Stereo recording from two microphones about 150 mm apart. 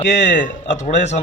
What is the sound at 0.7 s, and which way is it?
Speech, 50° left (ahead or behind).